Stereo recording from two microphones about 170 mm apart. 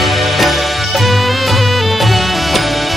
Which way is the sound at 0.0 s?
Centre (ahead or behind).